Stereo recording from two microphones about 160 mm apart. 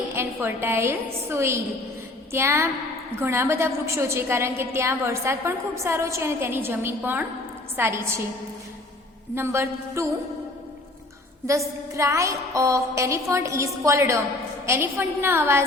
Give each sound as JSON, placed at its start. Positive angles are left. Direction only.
{"t": 0.1, "sound": "a woman's voice", "side_deg": -10}
{"t": 9.3, "sound": "a woman's voice", "side_deg": -15}
{"t": 11.9, "sound": "a woman's voice", "side_deg": -20}